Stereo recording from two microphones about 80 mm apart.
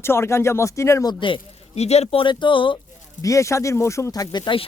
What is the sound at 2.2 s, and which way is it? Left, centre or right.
Speech, left.